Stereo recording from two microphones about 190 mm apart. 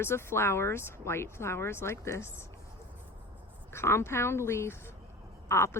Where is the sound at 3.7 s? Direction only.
15° left (ahead or behind).